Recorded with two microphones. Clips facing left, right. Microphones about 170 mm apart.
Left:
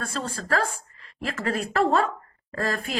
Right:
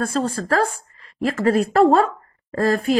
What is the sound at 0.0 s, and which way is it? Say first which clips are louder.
A woman's voice: right 9 dB; 40° right (ahead or behind).